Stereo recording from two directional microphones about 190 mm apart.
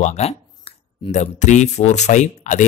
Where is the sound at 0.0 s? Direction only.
35° left (ahead or behind).